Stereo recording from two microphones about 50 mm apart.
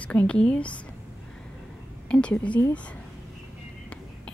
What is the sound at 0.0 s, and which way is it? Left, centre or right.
Speech, left.